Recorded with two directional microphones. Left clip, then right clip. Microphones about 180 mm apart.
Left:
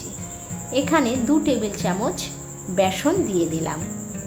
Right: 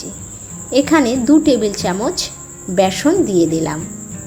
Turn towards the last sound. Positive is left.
turn(degrees=-30)  # may be behind; listen again after turning